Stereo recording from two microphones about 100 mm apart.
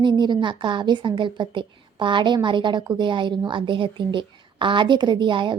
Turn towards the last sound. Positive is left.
turn(degrees=-55)  # may be behind; listen again after turning